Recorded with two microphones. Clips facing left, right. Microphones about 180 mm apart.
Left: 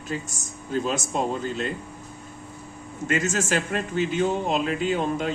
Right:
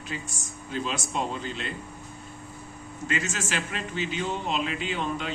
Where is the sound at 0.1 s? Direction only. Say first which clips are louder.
Left 6 dB; 45° left (ahead or behind).